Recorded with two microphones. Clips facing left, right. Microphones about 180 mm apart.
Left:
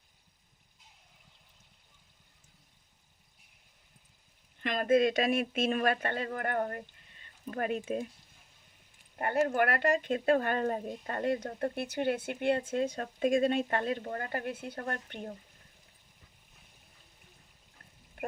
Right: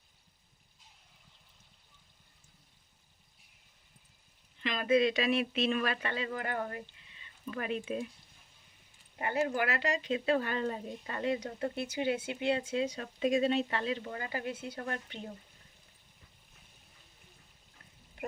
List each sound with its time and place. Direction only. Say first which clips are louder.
4.5 s speech: left 2 dB; 50° left (ahead or behind)
6.9 s a sound: even; 50° left (ahead or behind)
9.1 s speech: left 3 dB; 50° left (ahead or behind)